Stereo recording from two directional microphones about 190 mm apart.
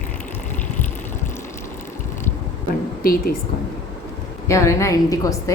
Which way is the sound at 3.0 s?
50° left (ahead or behind).